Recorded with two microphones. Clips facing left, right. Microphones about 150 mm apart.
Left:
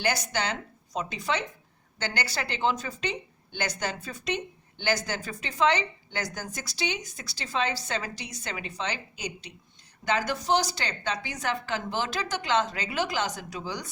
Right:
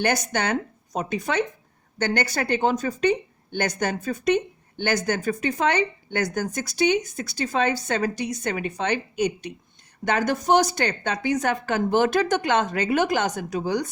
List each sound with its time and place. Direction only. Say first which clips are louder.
0.0 s a woman's voice: right 5 dB; 50° right (ahead or behind)